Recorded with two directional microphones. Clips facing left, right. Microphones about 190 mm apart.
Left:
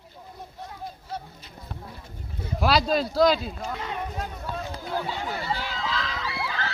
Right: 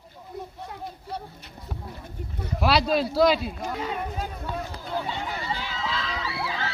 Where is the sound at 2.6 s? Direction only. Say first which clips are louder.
Even; centre (ahead or behind).